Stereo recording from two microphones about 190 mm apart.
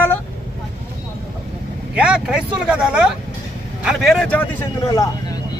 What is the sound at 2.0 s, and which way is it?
Speech, 5° right (ahead or behind).